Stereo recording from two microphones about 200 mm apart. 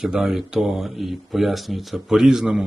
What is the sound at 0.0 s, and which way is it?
Speech, centre (ahead or behind).